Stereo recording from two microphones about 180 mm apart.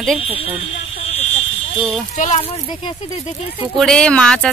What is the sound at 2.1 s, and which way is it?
Speech, 40° left (ahead or behind).